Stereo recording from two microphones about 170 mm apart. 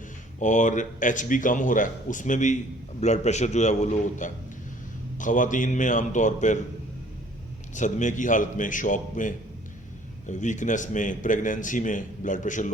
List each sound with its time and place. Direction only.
0.3 s a man's voice: 45° left (ahead or behind)
7.8 s a man's voice: 45° left (ahead or behind)